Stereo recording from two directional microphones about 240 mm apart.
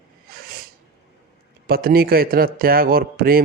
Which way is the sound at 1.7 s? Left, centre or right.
Right.